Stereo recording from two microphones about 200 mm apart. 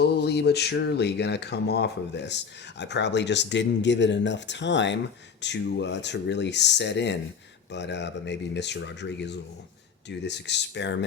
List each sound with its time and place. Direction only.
0.0 s speech: 55° left (ahead or behind)